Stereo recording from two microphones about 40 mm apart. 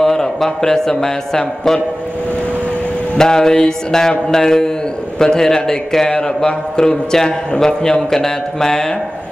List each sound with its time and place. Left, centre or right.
0.0 s a man's voice: centre
3.2 s a man's voice: centre